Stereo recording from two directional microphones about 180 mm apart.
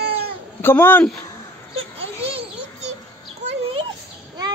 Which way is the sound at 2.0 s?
30° right (ahead or behind).